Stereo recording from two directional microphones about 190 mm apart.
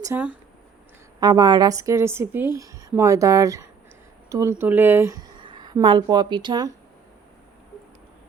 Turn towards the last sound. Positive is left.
turn(degrees=-25)  # may be behind; listen again after turning